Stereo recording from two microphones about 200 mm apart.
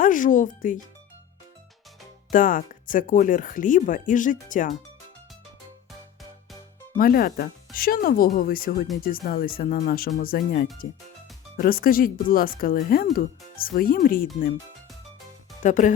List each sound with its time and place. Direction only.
0.0 s speech: 40° left (ahead or behind)
2.3 s speech: 45° left (ahead or behind)
6.9 s speech: 45° left (ahead or behind)
15.6 s speech: 40° left (ahead or behind)